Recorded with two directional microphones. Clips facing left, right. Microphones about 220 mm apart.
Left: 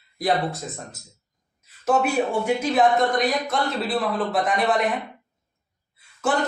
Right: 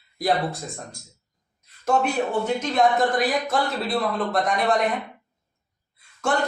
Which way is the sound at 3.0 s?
Centre (ahead or behind).